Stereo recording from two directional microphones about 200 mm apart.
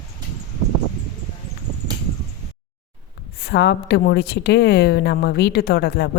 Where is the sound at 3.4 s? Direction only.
55° left (ahead or behind).